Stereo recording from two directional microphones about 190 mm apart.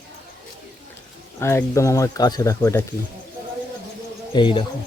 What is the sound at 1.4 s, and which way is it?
A man's voice, 15° left (ahead or behind).